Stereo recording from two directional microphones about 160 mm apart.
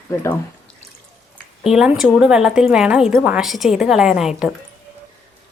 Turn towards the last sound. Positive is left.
turn(degrees=-5)  # may be behind; listen again after turning